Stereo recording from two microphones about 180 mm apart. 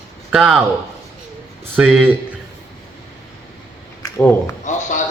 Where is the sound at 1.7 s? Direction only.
5° right (ahead or behind).